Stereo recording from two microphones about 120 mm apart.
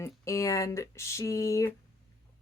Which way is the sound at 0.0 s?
25° left (ahead or behind).